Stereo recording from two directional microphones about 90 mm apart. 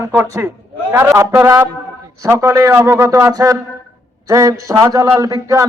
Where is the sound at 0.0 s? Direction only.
30° right (ahead or behind).